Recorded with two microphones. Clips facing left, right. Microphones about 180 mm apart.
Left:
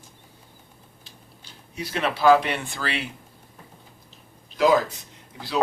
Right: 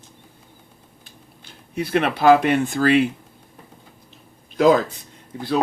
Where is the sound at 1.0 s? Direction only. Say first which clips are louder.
Right 4 dB; 55° right (ahead or behind).